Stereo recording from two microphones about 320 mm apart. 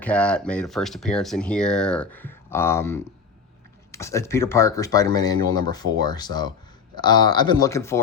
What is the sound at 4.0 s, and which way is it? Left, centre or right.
Speech, centre.